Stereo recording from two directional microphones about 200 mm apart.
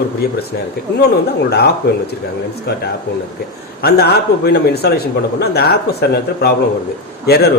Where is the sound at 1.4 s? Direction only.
50° left (ahead or behind).